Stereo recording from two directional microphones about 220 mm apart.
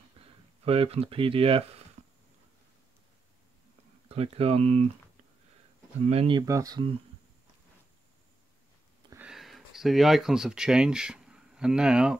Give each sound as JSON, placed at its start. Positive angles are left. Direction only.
{"t": 0.7, "sound": "speech", "side_deg": -25}
{"t": 4.1, "sound": "speech", "side_deg": -25}
{"t": 6.0, "sound": "speech", "side_deg": -25}
{"t": 9.1, "sound": "speech", "side_deg": -5}